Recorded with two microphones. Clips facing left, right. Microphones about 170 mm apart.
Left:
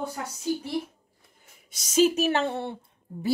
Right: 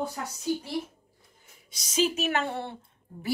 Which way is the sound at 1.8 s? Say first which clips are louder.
Left 6 dB; 45° left (ahead or behind).